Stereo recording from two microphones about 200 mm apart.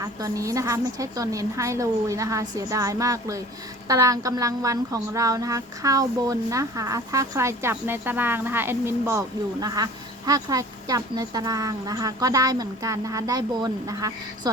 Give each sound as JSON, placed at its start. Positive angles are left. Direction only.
{"t": 0.0, "sound": "a woman's voice", "side_deg": -15}